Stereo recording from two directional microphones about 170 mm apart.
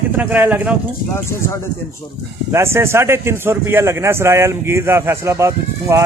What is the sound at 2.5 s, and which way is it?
Speech, 15° right (ahead or behind).